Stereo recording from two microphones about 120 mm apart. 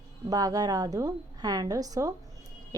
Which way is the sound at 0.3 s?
30° right (ahead or behind).